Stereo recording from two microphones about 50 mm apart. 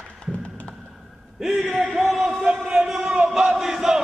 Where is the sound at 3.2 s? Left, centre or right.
Centre.